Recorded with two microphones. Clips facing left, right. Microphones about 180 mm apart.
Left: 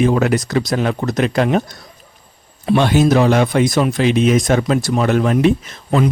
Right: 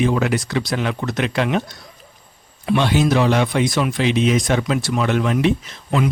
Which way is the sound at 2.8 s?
50° left (ahead or behind).